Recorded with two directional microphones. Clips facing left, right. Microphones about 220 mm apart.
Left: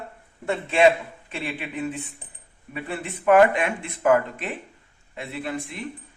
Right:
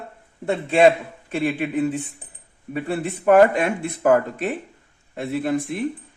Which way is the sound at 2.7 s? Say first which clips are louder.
Right 7 dB; 40° right (ahead or behind).